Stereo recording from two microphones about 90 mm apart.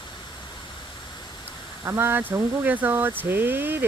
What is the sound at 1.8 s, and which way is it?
Speech, 30° right (ahead or behind).